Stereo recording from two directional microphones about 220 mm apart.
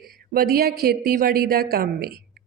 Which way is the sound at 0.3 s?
45° right (ahead or behind).